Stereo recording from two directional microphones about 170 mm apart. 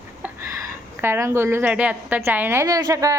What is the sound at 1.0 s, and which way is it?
A woman's voice, 15° right (ahead or behind).